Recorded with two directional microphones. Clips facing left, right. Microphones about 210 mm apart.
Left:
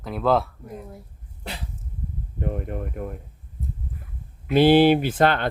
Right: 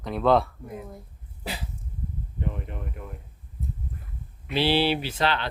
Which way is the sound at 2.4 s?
50° left (ahead or behind).